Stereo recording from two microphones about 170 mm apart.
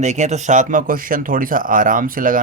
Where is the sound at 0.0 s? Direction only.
45° right (ahead or behind).